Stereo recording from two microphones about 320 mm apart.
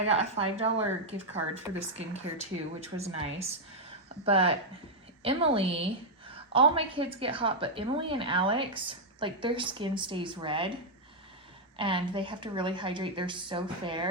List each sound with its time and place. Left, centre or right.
0.0 s a woman's voice: centre
11.8 s a woman's voice: centre